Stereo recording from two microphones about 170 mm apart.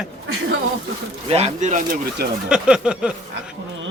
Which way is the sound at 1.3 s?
40° right (ahead or behind).